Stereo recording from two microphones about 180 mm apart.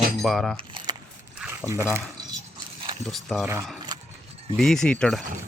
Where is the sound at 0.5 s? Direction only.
25° right (ahead or behind).